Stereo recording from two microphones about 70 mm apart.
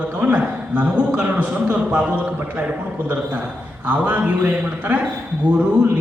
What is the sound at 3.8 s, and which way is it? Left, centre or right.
A man's voice, right.